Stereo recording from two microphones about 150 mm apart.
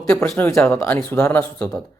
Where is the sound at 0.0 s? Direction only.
20° left (ahead or behind).